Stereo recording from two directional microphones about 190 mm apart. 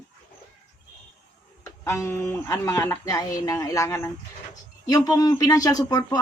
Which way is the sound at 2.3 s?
15° left (ahead or behind).